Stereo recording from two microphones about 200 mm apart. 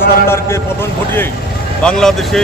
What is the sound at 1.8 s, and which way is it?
Speech, 5° left (ahead or behind).